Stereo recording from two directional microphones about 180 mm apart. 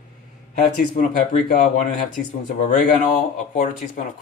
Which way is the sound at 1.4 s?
45° left (ahead or behind).